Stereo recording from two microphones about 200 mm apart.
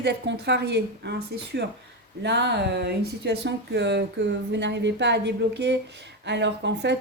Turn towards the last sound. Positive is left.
turn(degrees=-60)  # may be behind; listen again after turning